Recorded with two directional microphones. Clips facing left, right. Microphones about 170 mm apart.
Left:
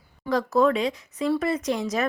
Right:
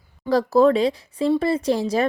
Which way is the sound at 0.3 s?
35° right (ahead or behind).